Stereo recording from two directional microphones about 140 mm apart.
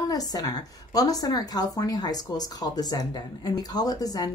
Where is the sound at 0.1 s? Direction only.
25° left (ahead or behind).